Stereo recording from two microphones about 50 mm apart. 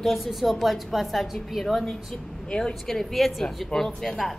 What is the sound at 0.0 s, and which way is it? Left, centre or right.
A woman's voice, centre.